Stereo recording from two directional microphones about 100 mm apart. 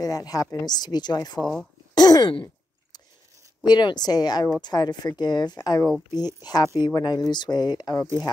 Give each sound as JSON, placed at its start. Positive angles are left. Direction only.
{"t": 0.0, "sound": "speech", "side_deg": 40}
{"t": 1.4, "sound": "speech", "side_deg": 0}
{"t": 2.0, "sound": "a sound", "side_deg": 40}
{"t": 3.6, "sound": "speech", "side_deg": 45}